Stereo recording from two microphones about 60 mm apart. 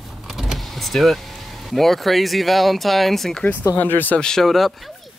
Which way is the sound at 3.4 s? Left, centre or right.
Left.